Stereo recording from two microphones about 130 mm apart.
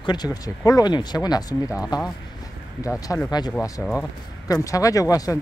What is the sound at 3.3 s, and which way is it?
Speech, 30° left (ahead or behind).